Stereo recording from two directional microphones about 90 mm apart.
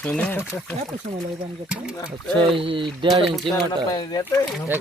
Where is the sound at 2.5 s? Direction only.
75° right (ahead or behind).